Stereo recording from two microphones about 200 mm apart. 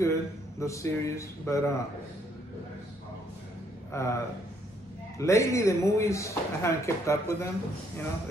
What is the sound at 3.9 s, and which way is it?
Speech, 15° left (ahead or behind).